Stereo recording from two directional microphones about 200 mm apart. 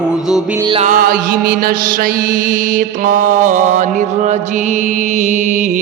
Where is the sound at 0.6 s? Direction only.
25° right (ahead or behind).